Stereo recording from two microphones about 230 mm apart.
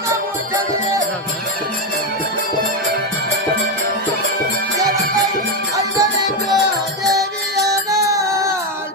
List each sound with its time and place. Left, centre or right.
5.7 s music: centre